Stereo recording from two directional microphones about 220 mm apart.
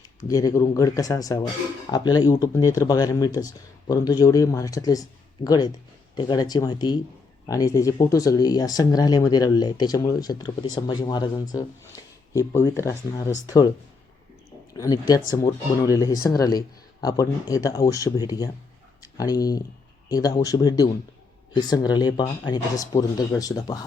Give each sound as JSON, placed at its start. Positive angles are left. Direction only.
{"t": 0.2, "sound": "speech", "side_deg": 15}
{"t": 14.7, "sound": "speech", "side_deg": 15}